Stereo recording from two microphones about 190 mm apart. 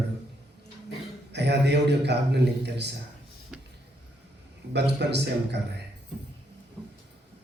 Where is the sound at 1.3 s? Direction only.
60° right (ahead or behind).